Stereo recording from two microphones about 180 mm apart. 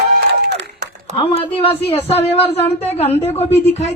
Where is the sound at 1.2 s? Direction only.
35° left (ahead or behind).